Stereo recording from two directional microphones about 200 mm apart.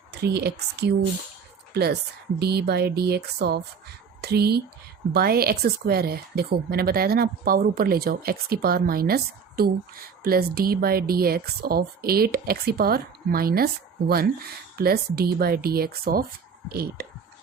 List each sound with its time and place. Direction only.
0.1 s a woman's voice: 55° right (ahead or behind)
14.8 s a woman's voice: 50° right (ahead or behind)